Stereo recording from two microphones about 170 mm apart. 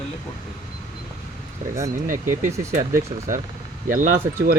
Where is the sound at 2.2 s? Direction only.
15° right (ahead or behind).